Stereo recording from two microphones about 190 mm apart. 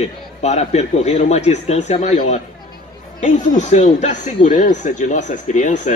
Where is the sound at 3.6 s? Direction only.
40° left (ahead or behind).